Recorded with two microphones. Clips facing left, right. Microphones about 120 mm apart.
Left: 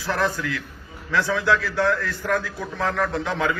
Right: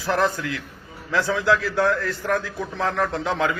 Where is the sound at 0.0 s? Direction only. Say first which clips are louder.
Right 2 dB; 20° right (ahead or behind).